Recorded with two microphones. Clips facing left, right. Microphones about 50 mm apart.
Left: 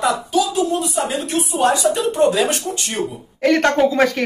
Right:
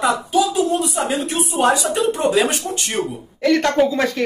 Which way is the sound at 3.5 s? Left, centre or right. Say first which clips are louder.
Left 1 dB; left.